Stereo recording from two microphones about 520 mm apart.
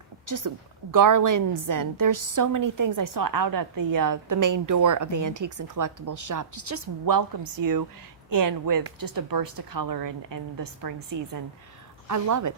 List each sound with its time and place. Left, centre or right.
0.3 s a woman's voice: right